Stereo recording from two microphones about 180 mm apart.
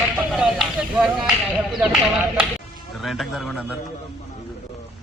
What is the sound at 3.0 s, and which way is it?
Speech, centre (ahead or behind).